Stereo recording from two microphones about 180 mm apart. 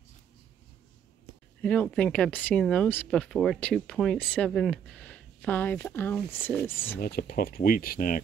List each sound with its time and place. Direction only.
1.6 s speech: 5° left (ahead or behind)
7.0 s speech: 55° left (ahead or behind)